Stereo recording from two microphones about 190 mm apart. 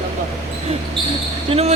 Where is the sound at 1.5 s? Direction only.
35° right (ahead or behind).